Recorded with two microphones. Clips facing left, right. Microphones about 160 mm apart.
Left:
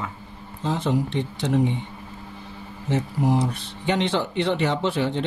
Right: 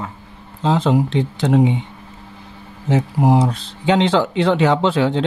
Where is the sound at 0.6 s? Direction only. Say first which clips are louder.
Right 7 dB; 90° right.